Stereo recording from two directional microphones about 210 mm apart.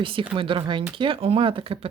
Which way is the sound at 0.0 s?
25° right (ahead or behind).